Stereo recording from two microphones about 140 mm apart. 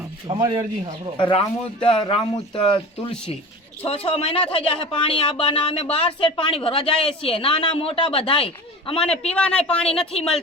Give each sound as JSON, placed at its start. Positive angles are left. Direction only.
{"t": 0.3, "sound": "speech", "side_deg": -30}
{"t": 1.1, "sound": "speech", "side_deg": 40}
{"t": 9.0, "sound": "speech", "side_deg": 5}